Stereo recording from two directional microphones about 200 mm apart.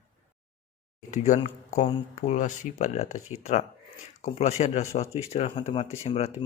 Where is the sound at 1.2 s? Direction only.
35° left (ahead or behind).